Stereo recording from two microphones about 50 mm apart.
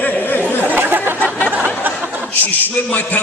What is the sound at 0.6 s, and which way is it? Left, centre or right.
Speech, right.